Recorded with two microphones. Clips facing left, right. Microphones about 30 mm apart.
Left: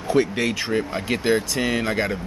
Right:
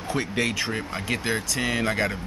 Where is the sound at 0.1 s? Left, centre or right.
Centre.